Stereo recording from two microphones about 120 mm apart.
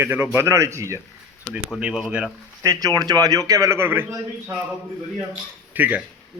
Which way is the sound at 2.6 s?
30° right (ahead or behind).